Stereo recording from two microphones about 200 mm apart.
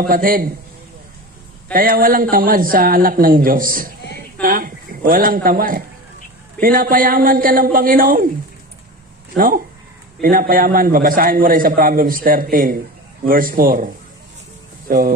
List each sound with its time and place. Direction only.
0.0 s a man's voice: 45° right (ahead or behind)
1.7 s a man's voice: 45° right (ahead or behind)
4.4 s a sound: 45° right (ahead or behind)
6.6 s a man's voice: 45° right (ahead or behind)
10.2 s a man's voice: 45° right (ahead or behind)
14.9 s a man's voice: 45° right (ahead or behind)